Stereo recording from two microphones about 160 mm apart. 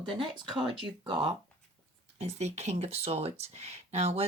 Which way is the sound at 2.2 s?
45° right (ahead or behind).